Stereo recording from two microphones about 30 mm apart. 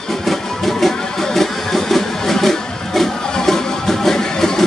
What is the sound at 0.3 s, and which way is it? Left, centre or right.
Music, centre.